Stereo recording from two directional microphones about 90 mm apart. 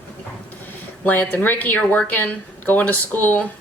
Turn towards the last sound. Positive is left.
turn(degrees=20)  # may be behind; listen again after turning